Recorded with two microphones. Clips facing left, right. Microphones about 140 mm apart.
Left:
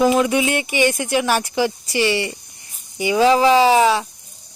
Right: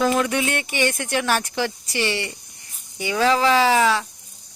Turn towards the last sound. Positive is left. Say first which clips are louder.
# left 4 dB
turn(degrees=15)  # may be behind; listen again after turning